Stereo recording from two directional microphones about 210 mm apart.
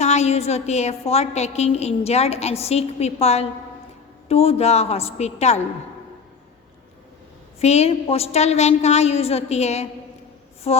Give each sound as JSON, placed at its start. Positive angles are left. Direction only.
{"t": 0.0, "sound": "a woman's voice", "side_deg": 30}
{"t": 7.6, "sound": "a woman's voice", "side_deg": 30}